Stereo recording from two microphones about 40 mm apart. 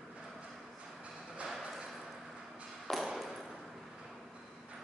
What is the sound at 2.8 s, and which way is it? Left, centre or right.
Ping, centre.